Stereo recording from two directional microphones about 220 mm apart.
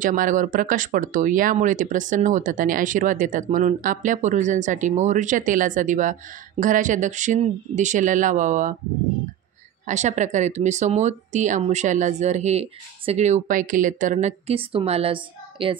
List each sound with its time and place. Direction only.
0.0 s speech: 35° right (ahead or behind)
9.8 s speech: 35° right (ahead or behind)